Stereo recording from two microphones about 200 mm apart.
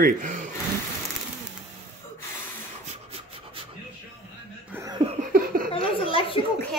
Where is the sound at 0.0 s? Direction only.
40° right (ahead or behind).